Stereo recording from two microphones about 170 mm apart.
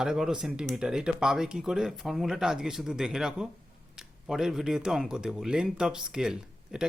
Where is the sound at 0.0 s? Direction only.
5° right (ahead or behind).